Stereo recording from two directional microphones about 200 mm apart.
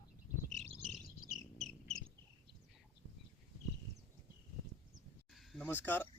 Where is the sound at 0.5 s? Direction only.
30° right (ahead or behind).